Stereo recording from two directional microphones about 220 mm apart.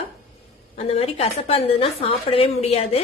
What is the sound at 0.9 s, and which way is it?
A woman's voice, 25° left (ahead or behind).